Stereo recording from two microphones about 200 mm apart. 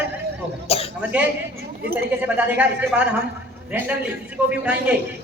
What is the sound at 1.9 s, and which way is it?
A woman's voice, 10° right (ahead or behind).